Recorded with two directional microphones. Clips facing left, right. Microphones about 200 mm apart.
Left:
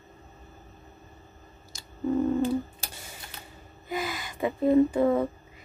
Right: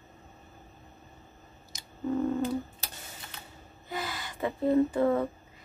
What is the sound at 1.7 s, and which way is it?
Busy signal, 20° right (ahead or behind).